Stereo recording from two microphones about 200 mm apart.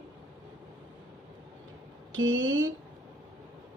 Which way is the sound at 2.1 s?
75° right (ahead or behind).